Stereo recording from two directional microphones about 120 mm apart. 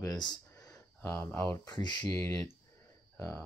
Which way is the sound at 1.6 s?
35° left (ahead or behind).